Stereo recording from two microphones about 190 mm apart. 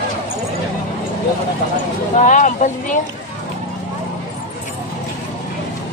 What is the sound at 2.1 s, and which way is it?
Speech, 40° left (ahead or behind).